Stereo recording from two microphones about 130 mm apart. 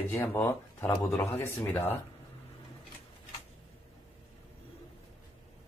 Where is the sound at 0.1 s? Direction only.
15° left (ahead or behind).